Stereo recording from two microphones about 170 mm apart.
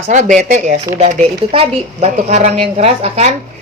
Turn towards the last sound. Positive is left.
turn(degrees=-40)  # may be behind; listen again after turning